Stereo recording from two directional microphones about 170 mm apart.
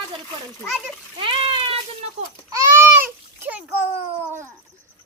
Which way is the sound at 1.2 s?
30° right (ahead or behind).